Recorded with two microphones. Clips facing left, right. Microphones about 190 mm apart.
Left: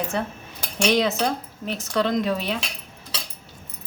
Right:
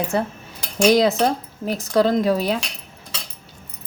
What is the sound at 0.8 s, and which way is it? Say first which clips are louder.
Speech: right 5 dB; 35° right (ahead or behind).